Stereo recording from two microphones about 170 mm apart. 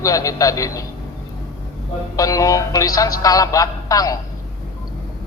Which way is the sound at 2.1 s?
20° left (ahead or behind).